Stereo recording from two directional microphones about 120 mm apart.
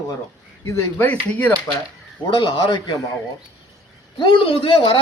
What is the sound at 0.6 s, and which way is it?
Speech, 25° left (ahead or behind).